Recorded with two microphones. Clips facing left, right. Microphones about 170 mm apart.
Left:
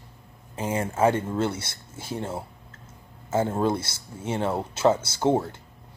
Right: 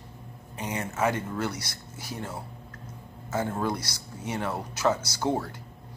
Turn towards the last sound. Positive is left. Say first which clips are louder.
# left 5 dB
turn(degrees=25)  # may be behind; listen again after turning